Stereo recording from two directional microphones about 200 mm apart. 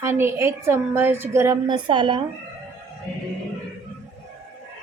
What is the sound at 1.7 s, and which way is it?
Speech, 25° right (ahead or behind).